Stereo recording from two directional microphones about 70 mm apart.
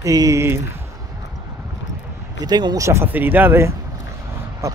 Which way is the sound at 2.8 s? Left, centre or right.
Right.